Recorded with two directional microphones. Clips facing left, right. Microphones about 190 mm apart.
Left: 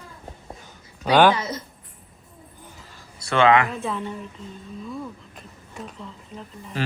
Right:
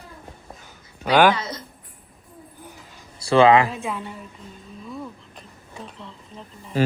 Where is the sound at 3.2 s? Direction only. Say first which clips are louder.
Right 3 dB; 30° right (ahead or behind).